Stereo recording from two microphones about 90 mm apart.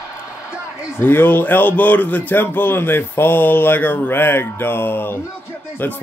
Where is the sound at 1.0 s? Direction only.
25° left (ahead or behind).